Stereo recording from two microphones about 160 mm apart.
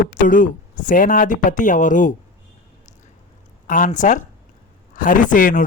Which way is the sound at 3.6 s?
55° left (ahead or behind).